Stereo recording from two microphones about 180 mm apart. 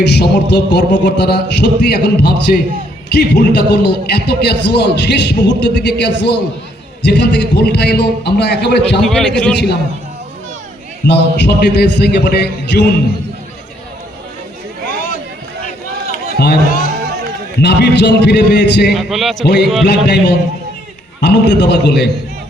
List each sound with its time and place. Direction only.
0.0 s a man's voice: 70° left (ahead or behind)
2.5 s a man's voice: 55° left (ahead or behind)
9.0 s a man's voice: 5° left (ahead or behind)
11.0 s a man's voice: 70° left (ahead or behind)
14.8 s a sound: 50° left (ahead or behind)
17.6 s a man's voice: 65° left (ahead or behind)
18.9 s a man's voice: centre (ahead or behind)
19.8 s a man's voice: 70° left (ahead or behind)
21.2 s a man's voice: 75° left (ahead or behind)